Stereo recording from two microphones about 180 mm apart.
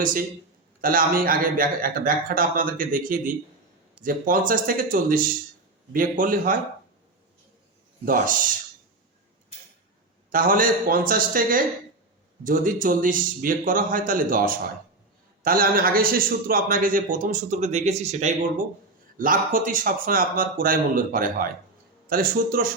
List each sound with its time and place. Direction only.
0.0 s a man's voice: 50° right (ahead or behind)
8.0 s a man's voice: 50° right (ahead or behind)
10.3 s a man's voice: 50° right (ahead or behind)